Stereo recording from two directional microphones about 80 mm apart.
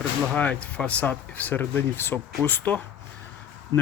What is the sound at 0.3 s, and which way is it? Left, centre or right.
Speech, centre.